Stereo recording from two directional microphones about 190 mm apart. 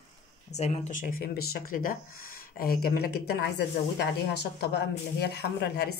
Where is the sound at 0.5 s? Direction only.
35° left (ahead or behind).